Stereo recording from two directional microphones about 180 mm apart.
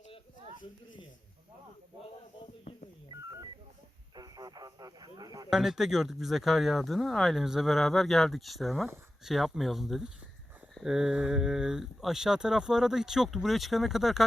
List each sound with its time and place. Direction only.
4.1 s speech: 20° right (ahead or behind)
5.5 s speech: centre (ahead or behind)